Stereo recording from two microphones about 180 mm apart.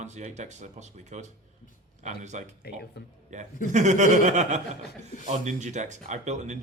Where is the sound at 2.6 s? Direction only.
60° left (ahead or behind).